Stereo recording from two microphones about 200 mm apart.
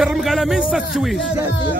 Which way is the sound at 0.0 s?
Centre (ahead or behind).